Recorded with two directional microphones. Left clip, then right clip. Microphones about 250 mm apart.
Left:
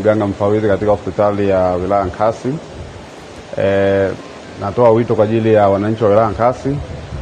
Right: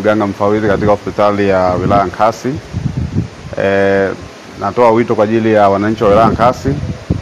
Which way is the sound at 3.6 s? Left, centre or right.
Right.